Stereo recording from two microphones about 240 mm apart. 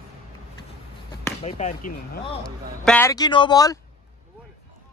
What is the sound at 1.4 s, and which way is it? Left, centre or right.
Speech, left.